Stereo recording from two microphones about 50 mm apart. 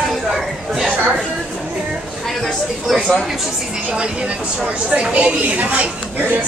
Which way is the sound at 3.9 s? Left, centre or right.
Centre.